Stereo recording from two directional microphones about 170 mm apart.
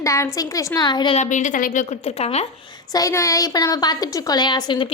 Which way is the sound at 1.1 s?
45° left (ahead or behind).